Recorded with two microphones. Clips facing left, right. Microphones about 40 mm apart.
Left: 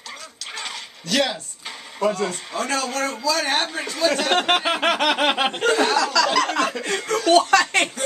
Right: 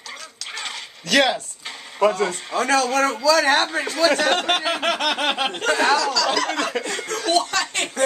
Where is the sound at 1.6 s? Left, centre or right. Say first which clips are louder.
Even; centre.